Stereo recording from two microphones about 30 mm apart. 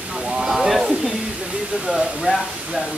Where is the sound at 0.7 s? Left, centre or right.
Centre.